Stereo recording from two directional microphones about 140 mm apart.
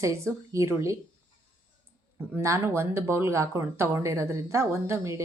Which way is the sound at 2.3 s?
20° right (ahead or behind).